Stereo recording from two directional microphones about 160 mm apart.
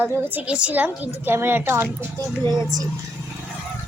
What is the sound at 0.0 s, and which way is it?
A woman's voice, 15° right (ahead or behind).